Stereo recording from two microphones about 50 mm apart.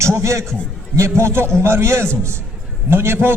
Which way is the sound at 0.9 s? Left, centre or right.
Right.